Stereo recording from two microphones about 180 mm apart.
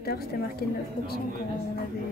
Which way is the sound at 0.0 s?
60° left (ahead or behind).